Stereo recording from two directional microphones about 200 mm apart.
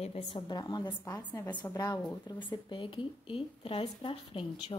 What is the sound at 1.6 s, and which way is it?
Speech, 20° left (ahead or behind).